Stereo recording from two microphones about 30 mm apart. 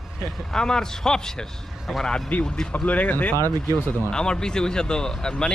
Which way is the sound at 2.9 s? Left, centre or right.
Left.